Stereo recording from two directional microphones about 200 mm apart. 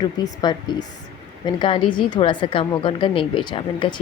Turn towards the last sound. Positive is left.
turn(degrees=25)  # may be behind; listen again after turning